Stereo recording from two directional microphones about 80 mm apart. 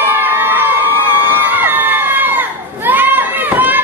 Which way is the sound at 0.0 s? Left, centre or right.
Right.